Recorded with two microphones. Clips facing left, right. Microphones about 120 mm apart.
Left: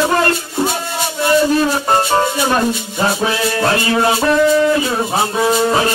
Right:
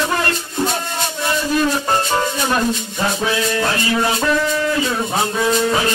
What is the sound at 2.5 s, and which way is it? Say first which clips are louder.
Music: left 3 dB; 40° left (ahead or behind).